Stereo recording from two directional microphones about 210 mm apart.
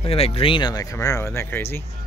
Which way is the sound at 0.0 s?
30° left (ahead or behind).